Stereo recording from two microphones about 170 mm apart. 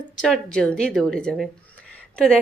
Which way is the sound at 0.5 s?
5° left (ahead or behind).